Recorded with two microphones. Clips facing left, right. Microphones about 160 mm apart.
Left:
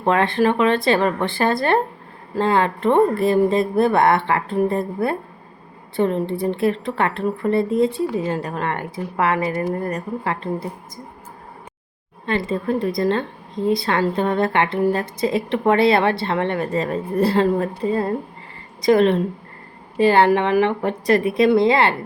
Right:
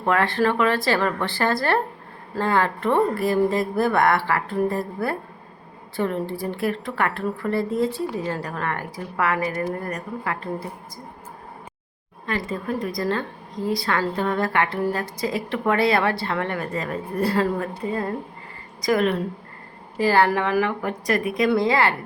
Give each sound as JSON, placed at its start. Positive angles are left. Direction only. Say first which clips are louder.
{"t": 0.0, "sound": "a woman's voice", "louder": "left 3 dB", "side_deg": 20}
{"t": 12.2, "sound": "a woman's voice", "louder": "left 5 dB", "side_deg": 25}